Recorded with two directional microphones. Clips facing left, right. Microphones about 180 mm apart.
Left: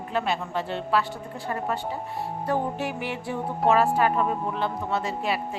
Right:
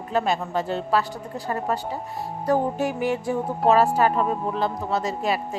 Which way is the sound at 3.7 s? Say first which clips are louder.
Right 2 dB; 40° right (ahead or behind).